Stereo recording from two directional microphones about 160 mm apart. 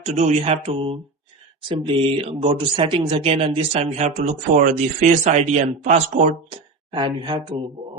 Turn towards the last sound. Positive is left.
turn(degrees=-30)  # may be behind; listen again after turning